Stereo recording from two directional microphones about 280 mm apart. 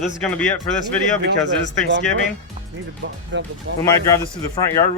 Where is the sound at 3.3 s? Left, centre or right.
Right.